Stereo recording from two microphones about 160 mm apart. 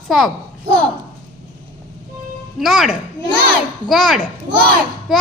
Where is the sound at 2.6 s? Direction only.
Centre (ahead or behind).